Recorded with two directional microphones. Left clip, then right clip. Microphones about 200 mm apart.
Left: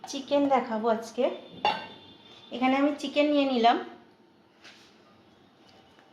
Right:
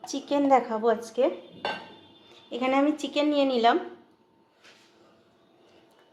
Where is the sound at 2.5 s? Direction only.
50° right (ahead or behind).